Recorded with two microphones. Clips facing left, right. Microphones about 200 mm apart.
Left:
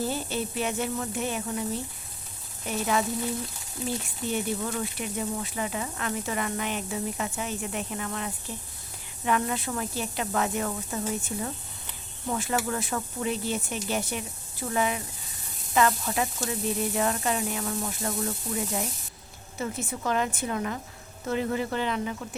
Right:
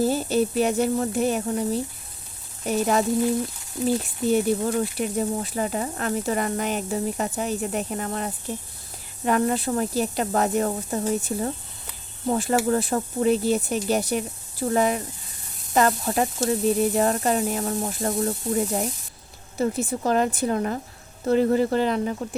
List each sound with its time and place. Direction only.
0.0 s speech: 40° right (ahead or behind)